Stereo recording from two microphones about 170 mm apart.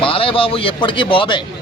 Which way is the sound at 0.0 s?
30° left (ahead or behind).